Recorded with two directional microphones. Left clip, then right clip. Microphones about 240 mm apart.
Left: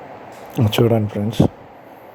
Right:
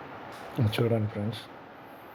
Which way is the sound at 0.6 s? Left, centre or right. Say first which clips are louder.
Left 11 dB; left.